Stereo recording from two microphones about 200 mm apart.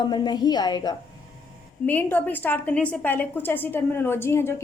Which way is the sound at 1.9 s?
10° left (ahead or behind).